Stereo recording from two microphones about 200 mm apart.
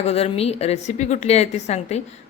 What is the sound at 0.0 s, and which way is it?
A woman's voice, 30° left (ahead or behind).